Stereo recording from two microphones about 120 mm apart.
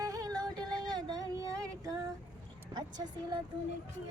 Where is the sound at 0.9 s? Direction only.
35° right (ahead or behind).